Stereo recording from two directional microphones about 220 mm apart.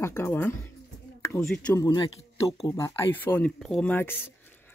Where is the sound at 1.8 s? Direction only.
15° left (ahead or behind).